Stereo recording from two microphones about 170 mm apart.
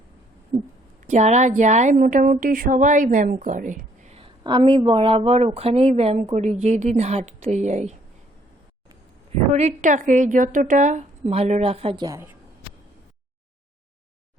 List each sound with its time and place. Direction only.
1.0 s a woman's voice: 40° right (ahead or behind)
4.4 s a woman's voice: 30° right (ahead or behind)
9.5 s a woman's voice: 40° right (ahead or behind); by 12.4 s 15° right (ahead or behind)